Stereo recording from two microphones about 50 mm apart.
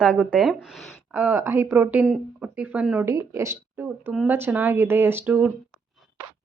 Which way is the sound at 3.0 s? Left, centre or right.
Right.